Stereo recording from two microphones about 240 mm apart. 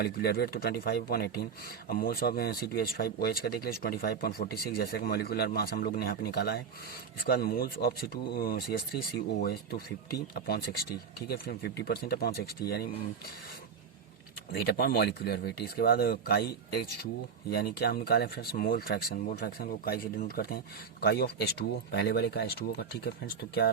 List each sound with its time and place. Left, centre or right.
0.0 s speech: left
14.5 s speech: left
17.7 s speech: left